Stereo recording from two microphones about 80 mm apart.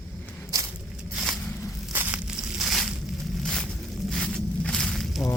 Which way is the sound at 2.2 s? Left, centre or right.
Centre.